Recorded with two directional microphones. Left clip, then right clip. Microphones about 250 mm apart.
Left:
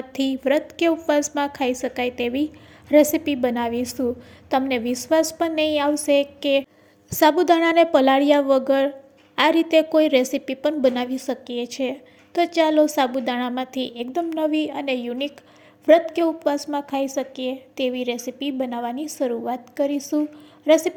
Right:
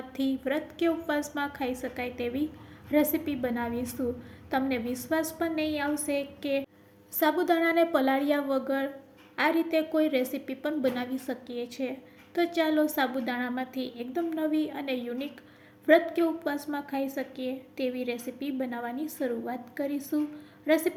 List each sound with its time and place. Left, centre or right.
0.1 s a woman's voice: left